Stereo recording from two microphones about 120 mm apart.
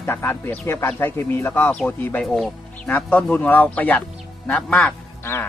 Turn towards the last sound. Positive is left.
turn(degrees=20)  # may be behind; listen again after turning